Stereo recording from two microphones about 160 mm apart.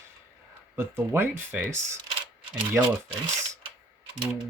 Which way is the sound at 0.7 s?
15° right (ahead or behind).